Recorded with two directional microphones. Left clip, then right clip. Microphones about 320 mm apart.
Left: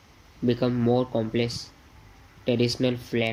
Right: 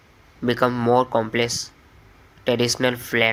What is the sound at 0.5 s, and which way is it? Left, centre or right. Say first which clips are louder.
Speech: right 8 dB; right.